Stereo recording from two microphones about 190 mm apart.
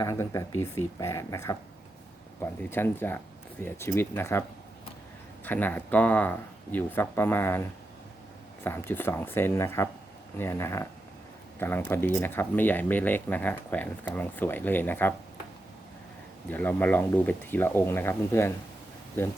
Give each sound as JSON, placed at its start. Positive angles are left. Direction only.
{"t": 0.0, "sound": "speech", "side_deg": 15}
{"t": 5.5, "sound": "speech", "side_deg": 10}
{"t": 8.6, "sound": "speech", "side_deg": 10}
{"t": 16.5, "sound": "speech", "side_deg": 10}